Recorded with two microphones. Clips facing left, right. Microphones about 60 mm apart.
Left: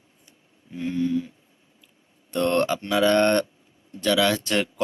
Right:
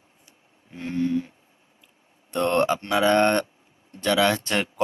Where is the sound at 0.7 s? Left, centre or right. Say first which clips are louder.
Even; right.